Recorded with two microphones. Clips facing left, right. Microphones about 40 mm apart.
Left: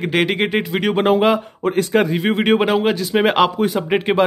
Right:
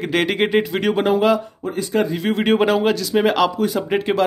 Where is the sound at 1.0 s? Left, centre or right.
Left.